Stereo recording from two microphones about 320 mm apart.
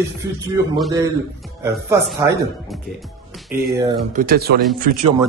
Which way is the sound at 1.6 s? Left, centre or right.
Centre.